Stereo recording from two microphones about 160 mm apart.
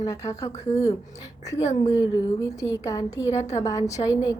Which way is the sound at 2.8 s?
20° left (ahead or behind).